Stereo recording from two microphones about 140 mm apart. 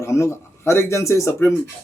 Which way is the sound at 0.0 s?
20° left (ahead or behind).